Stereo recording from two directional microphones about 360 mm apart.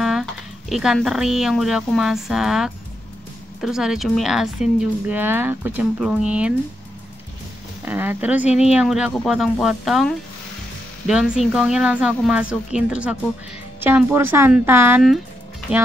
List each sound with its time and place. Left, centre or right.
0.0 s speech: centre
7.8 s speech: centre
8.5 s speech: centre
8.7 s speech: centre